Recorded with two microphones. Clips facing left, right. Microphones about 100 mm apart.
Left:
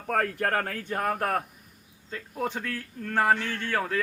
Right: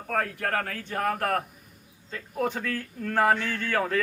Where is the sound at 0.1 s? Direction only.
35° left (ahead or behind).